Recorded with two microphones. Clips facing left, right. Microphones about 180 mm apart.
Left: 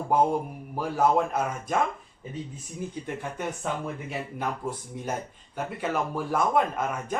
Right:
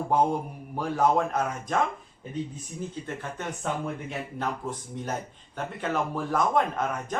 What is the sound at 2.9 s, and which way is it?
A man's voice, 15° left (ahead or behind).